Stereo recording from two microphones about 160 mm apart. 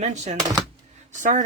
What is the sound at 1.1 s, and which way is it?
Speech, 50° right (ahead or behind).